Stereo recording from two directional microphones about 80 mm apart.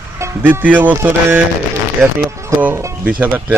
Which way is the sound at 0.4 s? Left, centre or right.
Centre.